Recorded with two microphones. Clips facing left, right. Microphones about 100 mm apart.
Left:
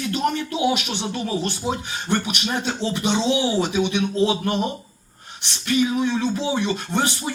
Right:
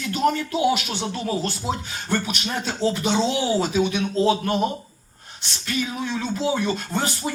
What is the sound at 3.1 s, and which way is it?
A man's voice, 20° left (ahead or behind).